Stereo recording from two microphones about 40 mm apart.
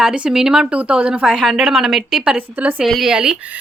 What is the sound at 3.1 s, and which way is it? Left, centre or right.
Speech, centre.